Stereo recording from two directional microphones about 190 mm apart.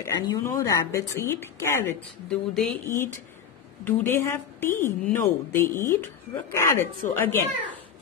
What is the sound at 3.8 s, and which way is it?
A woman's voice, 15° left (ahead or behind).